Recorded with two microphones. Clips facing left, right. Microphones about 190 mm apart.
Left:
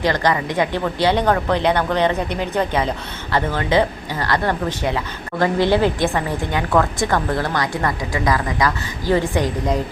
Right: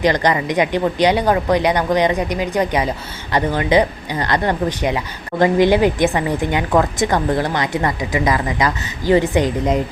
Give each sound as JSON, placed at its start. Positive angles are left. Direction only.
{"t": 0.0, "sound": "speech", "side_deg": -20}